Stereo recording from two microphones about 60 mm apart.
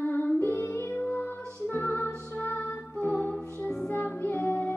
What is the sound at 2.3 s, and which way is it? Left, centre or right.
Music, left.